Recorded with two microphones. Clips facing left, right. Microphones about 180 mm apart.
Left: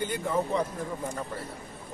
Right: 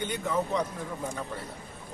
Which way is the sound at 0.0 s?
5° left (ahead or behind).